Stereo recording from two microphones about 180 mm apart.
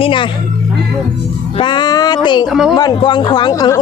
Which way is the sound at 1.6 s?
25° left (ahead or behind).